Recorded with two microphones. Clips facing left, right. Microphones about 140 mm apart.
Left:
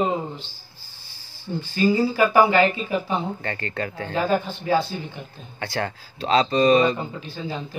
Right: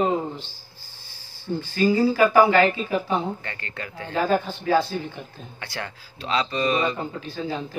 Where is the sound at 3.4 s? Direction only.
40° left (ahead or behind).